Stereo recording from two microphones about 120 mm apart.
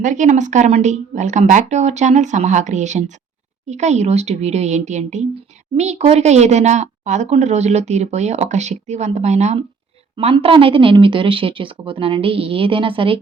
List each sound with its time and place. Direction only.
0.0 s a woman's voice: 90° right
5.7 s a woman's voice: 70° right (ahead or behind)
10.3 s speech: 45° right (ahead or behind)